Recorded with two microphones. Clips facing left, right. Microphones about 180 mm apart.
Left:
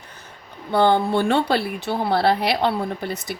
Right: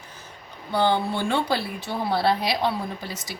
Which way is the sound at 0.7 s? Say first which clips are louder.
Left 5 dB; 55° left (ahead or behind).